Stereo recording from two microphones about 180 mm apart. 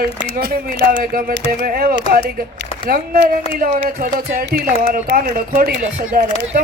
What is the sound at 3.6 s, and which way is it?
Speech, 50° right (ahead or behind).